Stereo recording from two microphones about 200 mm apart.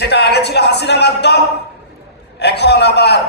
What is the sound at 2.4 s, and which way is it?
Speech, 55° left (ahead or behind).